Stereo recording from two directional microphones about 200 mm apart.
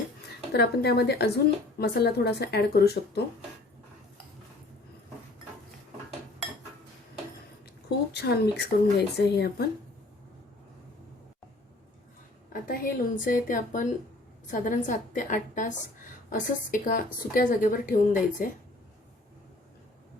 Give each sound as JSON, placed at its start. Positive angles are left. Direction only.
{"t": 0.5, "sound": "speech", "side_deg": 55}
{"t": 7.9, "sound": "speech", "side_deg": 55}
{"t": 12.6, "sound": "a woman's voice", "side_deg": 45}